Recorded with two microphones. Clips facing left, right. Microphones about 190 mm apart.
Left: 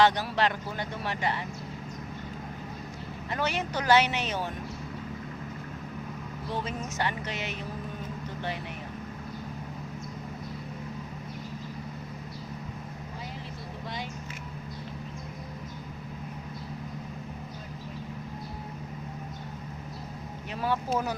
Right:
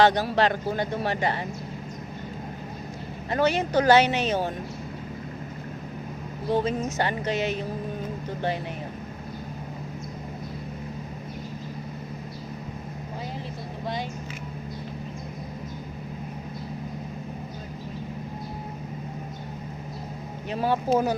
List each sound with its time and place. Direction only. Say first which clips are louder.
0.0 s speech: right 4 dB; 40° right (ahead or behind)
3.2 s speech: right 7 dB; 40° right (ahead or behind)
6.5 s speech: right 10 dB; 40° right (ahead or behind)
20.5 s speech: right 6 dB; 30° right (ahead or behind)